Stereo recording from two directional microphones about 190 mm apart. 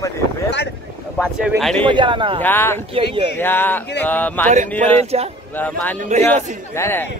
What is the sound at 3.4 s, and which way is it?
A man's voice, 10° left (ahead or behind).